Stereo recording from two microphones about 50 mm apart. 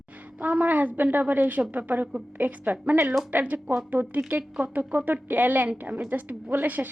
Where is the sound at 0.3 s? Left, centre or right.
Right.